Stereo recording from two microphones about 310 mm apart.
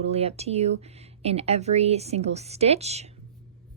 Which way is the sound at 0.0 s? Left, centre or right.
Centre.